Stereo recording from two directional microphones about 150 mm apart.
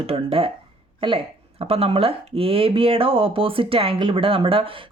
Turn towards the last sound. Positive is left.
turn(degrees=-35)  # may be behind; listen again after turning